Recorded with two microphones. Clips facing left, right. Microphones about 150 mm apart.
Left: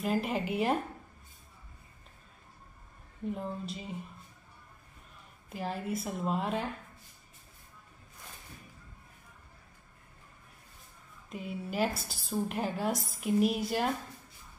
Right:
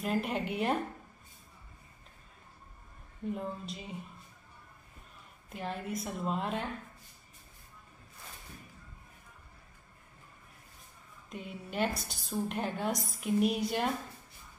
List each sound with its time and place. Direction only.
0.0 s a woman's voice: centre (ahead or behind)
3.3 s a woman's voice: centre (ahead or behind)
5.5 s a woman's voice: centre (ahead or behind)
11.2 s a woman's voice: centre (ahead or behind)